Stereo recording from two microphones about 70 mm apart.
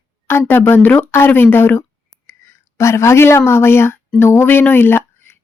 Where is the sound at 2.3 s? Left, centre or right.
Left.